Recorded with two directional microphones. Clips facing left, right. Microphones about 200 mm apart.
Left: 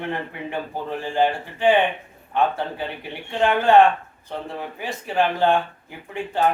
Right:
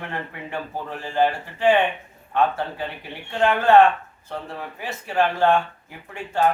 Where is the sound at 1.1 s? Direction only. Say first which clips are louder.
Right 1 dB; 15° left (ahead or behind).